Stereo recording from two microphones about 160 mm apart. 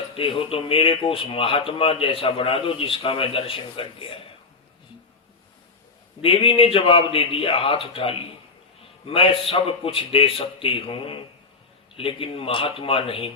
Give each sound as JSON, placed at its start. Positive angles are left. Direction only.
{"t": 0.2, "sound": "speech", "side_deg": 35}
{"t": 6.2, "sound": "speech", "side_deg": 35}